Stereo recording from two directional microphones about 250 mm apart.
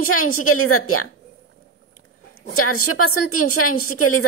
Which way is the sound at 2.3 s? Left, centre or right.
Left.